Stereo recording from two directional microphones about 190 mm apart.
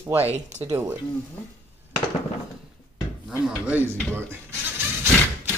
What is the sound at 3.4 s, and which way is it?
Speech, 5° right (ahead or behind).